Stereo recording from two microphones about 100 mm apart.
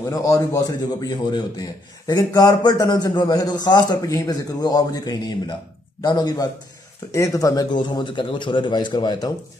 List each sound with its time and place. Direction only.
0.1 s a man's voice: 35° left (ahead or behind)